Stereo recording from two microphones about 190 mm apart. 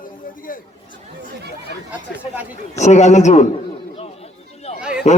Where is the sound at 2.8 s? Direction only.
35° left (ahead or behind).